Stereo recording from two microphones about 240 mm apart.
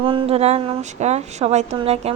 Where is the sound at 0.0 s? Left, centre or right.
Right.